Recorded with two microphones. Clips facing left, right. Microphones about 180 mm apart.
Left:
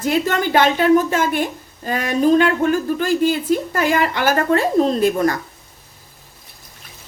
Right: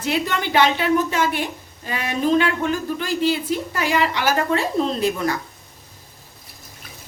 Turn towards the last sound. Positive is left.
turn(degrees=45)  # may be behind; listen again after turning